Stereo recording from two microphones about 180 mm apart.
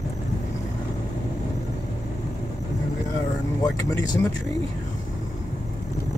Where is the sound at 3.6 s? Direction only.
20° left (ahead or behind).